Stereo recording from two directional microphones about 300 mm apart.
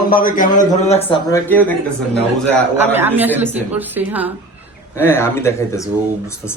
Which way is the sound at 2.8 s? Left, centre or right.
Centre.